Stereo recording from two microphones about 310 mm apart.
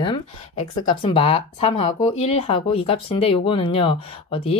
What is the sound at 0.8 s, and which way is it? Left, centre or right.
Speech, centre.